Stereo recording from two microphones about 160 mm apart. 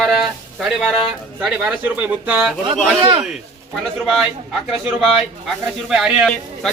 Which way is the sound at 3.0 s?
30° right (ahead or behind).